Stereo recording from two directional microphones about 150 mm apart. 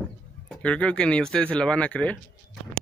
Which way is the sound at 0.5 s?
10° left (ahead or behind).